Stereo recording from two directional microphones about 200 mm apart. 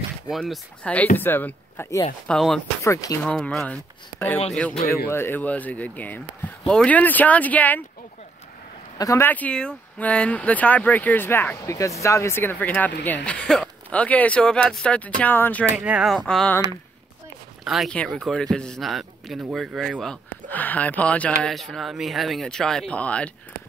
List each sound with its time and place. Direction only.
0.3 s a man's voice: centre (ahead or behind)
2.2 s a man's voice: centre (ahead or behind)
2.8 s speech: 15° left (ahead or behind)
3.3 s speech: 5° left (ahead or behind)
8.9 s speech: 15° left (ahead or behind)
15.7 s a man's voice: 5° right (ahead or behind)
17.6 s a man's voice: centre (ahead or behind)